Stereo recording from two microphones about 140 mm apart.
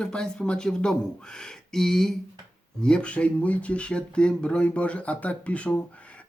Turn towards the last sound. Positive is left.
turn(degrees=10)  # may be behind; listen again after turning